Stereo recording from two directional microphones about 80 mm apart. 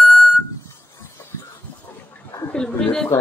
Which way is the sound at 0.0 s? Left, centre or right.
Centre.